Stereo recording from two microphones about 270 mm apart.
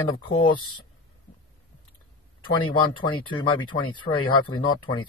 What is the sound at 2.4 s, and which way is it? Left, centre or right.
Speech, centre.